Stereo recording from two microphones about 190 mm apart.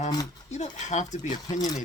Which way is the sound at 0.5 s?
35° left (ahead or behind).